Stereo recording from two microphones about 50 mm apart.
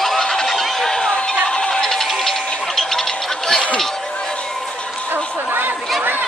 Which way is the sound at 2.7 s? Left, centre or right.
Centre.